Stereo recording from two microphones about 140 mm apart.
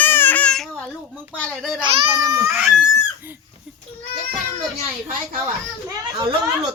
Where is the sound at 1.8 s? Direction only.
40° right (ahead or behind).